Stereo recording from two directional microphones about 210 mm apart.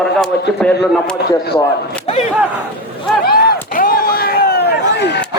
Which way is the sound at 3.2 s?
45° left (ahead or behind).